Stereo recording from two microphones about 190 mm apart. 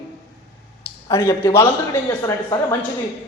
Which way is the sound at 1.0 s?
15° left (ahead or behind).